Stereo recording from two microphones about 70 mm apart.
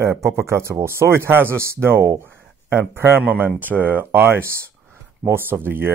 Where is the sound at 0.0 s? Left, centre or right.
Right.